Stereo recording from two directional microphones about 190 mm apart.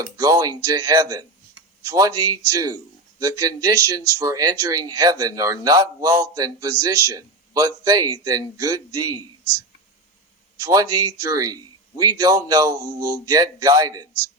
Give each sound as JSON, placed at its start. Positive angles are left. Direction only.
{"t": 0.2, "sound": "speech", "side_deg": -20}
{"t": 11.3, "sound": "speech", "side_deg": -20}